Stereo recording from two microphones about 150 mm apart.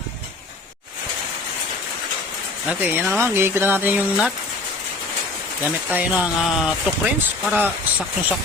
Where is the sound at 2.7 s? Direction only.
10° right (ahead or behind).